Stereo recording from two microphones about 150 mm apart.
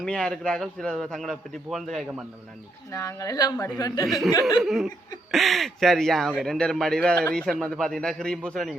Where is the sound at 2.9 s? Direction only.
20° left (ahead or behind).